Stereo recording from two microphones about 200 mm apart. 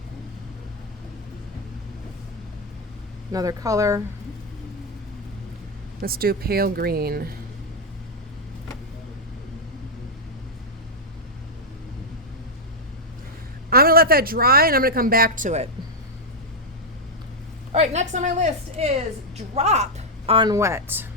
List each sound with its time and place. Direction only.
3.3 s speech: 15° right (ahead or behind)
6.0 s speech: 50° right (ahead or behind)
13.7 s speech: 50° right (ahead or behind)
17.7 s a woman's voice: 35° right (ahead or behind); by 21.1 s 10° right (ahead or behind)